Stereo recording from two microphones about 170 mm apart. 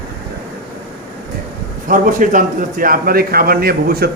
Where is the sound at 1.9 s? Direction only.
50° right (ahead or behind).